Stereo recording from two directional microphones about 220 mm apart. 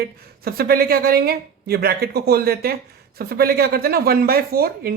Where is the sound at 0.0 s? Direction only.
45° right (ahead or behind).